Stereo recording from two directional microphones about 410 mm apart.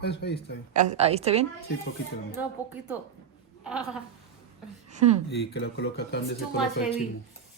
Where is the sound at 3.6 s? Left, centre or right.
Centre.